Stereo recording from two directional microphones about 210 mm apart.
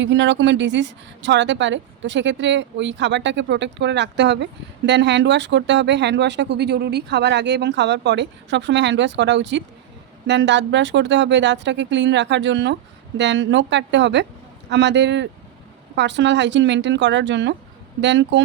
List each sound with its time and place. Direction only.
0.0 s speech: 60° right (ahead or behind)